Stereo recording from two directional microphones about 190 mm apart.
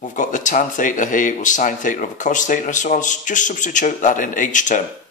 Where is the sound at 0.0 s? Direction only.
40° left (ahead or behind).